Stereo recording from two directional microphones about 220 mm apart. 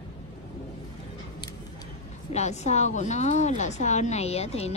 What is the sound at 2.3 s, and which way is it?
A woman's voice, 30° left (ahead or behind).